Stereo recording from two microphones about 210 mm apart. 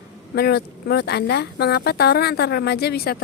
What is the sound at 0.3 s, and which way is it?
Speech, 50° left (ahead or behind).